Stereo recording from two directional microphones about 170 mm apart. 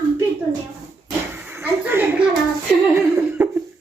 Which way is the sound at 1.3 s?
10° right (ahead or behind).